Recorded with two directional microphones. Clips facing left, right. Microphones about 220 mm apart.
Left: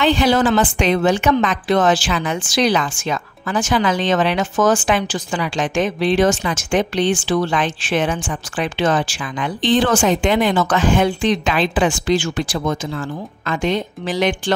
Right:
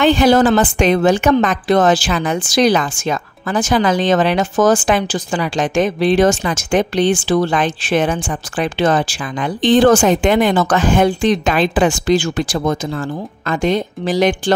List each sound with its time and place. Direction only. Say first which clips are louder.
0.0 s a woman's voice: right 4 dB; 50° right (ahead or behind)